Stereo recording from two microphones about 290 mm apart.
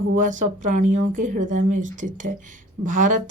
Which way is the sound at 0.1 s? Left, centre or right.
Right.